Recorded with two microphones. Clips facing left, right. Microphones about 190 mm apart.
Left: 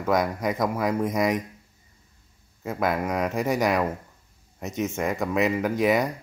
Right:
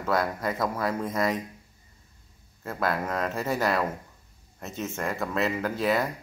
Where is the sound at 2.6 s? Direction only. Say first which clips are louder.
Left 3 dB; 15° left (ahead or behind).